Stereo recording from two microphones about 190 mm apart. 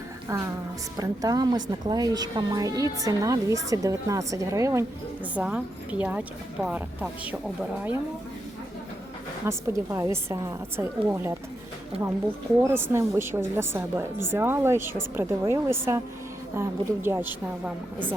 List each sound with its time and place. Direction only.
0.3 s a woman's voice: 15° right (ahead or behind)
9.5 s a woman's voice: 15° right (ahead or behind)
12.6 s a woman's voice: 15° right (ahead or behind)